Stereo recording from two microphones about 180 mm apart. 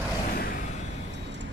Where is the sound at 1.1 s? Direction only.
75° right (ahead or behind).